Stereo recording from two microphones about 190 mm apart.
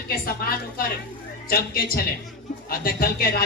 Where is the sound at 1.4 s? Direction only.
50° left (ahead or behind).